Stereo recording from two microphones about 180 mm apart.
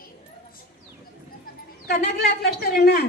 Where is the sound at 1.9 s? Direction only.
60° left (ahead or behind).